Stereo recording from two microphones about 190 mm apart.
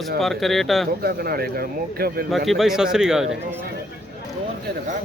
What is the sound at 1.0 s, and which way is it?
Speech, 55° right (ahead or behind).